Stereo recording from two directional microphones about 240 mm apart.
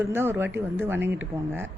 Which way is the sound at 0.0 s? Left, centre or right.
Centre.